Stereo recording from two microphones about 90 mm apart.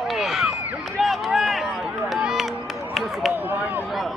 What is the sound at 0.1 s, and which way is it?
Run, 5° right (ahead or behind).